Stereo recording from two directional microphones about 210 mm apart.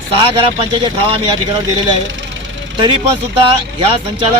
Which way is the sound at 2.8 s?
25° right (ahead or behind).